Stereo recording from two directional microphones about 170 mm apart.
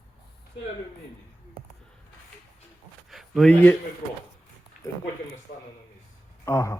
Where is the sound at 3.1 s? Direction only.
Centre (ahead or behind).